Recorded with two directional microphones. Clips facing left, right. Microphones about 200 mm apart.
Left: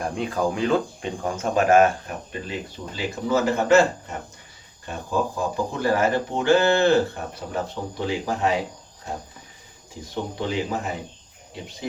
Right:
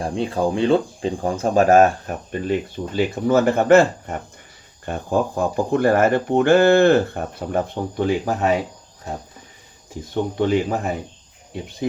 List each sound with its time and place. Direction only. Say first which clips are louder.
0.0 s speech: right 3 dB; 30° right (ahead or behind)
2.5 s speech: right 13 dB; 55° right (ahead or behind)
10.3 s speech: right 7 dB; 55° right (ahead or behind)